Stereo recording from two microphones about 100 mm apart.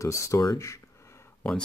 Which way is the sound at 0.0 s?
30° left (ahead or behind).